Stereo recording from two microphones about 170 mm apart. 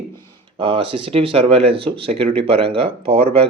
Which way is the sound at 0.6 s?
30° right (ahead or behind).